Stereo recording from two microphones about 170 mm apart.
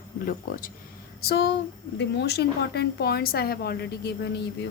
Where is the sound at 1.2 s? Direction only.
70° left (ahead or behind).